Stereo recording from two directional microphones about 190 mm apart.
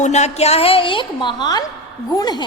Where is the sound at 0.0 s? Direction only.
35° left (ahead or behind).